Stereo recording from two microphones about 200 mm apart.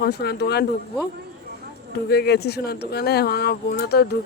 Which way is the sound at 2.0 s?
55° left (ahead or behind).